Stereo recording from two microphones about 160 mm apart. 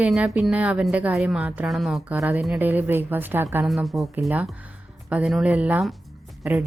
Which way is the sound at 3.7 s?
Centre (ahead or behind).